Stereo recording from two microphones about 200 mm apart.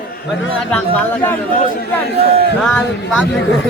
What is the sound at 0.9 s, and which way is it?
Speech, 10° left (ahead or behind).